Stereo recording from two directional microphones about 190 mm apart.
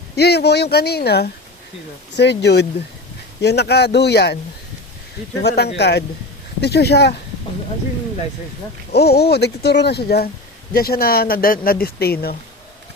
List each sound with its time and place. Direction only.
0.2 s speech: 60° left (ahead or behind)
5.4 s speech: 60° left (ahead or behind)
8.9 s speech: 60° left (ahead or behind)